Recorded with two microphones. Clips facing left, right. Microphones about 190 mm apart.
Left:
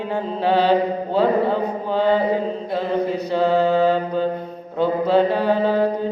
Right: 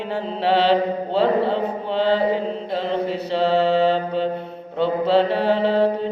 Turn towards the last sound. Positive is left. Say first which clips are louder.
# even
turn(degrees=-30)  # may be behind; listen again after turning